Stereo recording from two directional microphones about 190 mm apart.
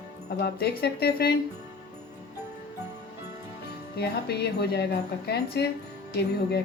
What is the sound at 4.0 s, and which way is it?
Speech, 60° left (ahead or behind).